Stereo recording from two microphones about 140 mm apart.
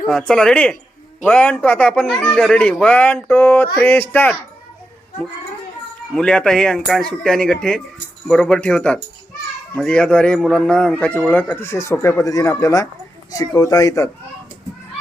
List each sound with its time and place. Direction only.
0.1 s a man's voice: 5° left (ahead or behind)
6.1 s a man's voice: 5° left (ahead or behind); by 14.1 s 25° left (ahead or behind)